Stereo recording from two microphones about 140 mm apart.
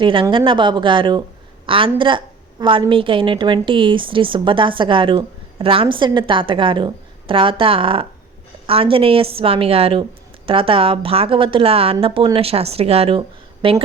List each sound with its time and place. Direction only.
0.0 s a woman's voice: 35° right (ahead or behind)